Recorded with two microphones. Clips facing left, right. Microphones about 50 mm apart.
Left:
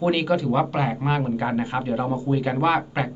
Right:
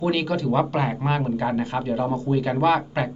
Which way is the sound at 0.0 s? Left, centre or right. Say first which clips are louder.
Left 2 dB; centre.